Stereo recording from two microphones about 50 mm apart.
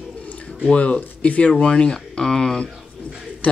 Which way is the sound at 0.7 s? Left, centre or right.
Left.